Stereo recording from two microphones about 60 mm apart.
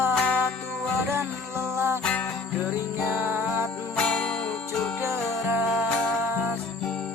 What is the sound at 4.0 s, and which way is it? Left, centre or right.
Music, centre.